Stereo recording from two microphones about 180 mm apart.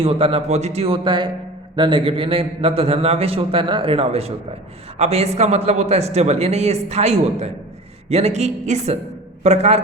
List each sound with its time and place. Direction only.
0.0 s a man's voice: 30° right (ahead or behind)